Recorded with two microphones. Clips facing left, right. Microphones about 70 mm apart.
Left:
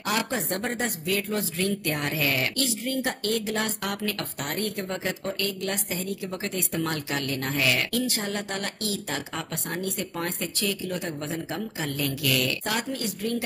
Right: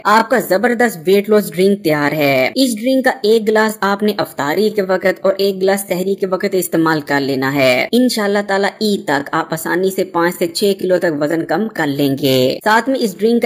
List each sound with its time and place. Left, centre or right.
0.0 s speech: right